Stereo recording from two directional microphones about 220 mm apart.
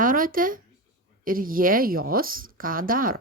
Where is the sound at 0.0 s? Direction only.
40° right (ahead or behind).